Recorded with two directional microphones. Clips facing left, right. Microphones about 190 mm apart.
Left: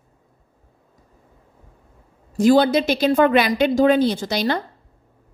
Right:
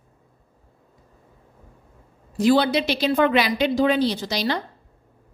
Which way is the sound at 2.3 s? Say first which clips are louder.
Left 3 dB; 45° left (ahead or behind).